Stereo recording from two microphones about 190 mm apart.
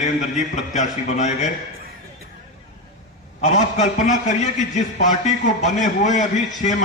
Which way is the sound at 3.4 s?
40° left (ahead or behind).